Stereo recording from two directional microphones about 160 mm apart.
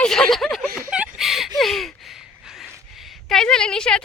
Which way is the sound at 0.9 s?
5° right (ahead or behind).